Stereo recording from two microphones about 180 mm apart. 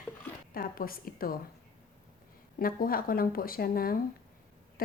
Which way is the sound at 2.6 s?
55° left (ahead or behind).